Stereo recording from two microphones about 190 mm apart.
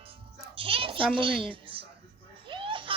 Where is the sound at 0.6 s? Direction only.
30° right (ahead or behind).